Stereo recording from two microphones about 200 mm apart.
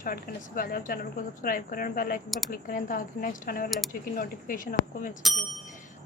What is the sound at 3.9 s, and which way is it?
Speech, 45° left (ahead or behind).